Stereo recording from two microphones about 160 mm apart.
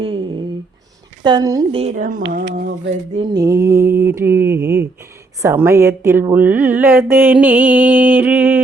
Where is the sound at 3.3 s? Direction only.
20° right (ahead or behind).